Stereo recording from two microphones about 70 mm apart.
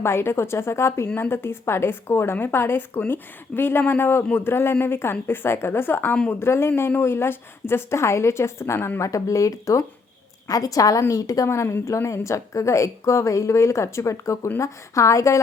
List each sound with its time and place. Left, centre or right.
0.0 s a woman's voice: left
9.0 s a woman's voice: left
11.4 s a woman's voice: left